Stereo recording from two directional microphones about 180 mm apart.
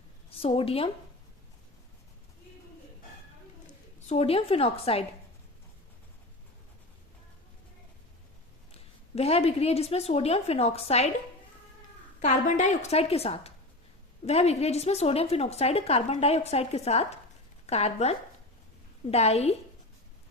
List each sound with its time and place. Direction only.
0.3 s a woman's voice: 30° left (ahead or behind)
4.0 s a woman's voice: 35° left (ahead or behind)
9.1 s a woman's voice: 35° left (ahead or behind)
12.2 s a woman's voice: 40° left (ahead or behind)